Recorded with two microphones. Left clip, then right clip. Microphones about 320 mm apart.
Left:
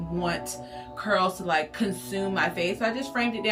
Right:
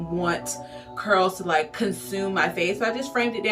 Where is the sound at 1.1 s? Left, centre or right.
Centre.